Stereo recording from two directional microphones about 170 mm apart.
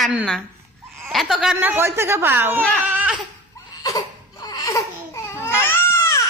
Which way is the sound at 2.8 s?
10° right (ahead or behind).